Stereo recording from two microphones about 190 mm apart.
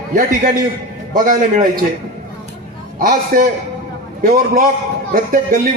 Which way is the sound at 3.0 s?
50° right (ahead or behind).